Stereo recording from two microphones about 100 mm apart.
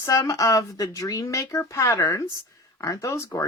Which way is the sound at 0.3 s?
35° left (ahead or behind).